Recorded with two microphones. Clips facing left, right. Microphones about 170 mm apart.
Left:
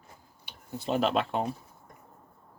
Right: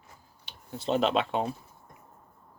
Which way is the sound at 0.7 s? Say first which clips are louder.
Right 1 dB; 5° left (ahead or behind).